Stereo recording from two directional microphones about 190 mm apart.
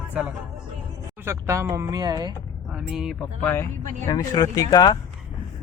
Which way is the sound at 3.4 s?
10° left (ahead or behind).